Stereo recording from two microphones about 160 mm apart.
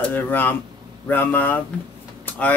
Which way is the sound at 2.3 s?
10° left (ahead or behind).